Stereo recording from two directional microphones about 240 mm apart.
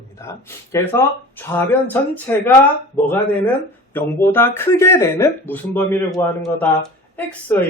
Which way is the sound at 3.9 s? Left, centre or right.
Centre.